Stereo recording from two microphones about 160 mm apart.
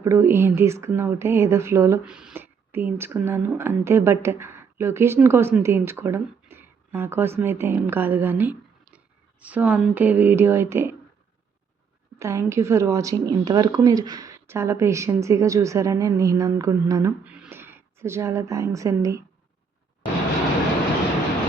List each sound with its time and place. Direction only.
0.0 s speech: 15° right (ahead or behind)
2.0 s speech: 5° right (ahead or behind)
12.2 s a woman's voice: 15° right (ahead or behind)
17.2 s speech: 10° right (ahead or behind)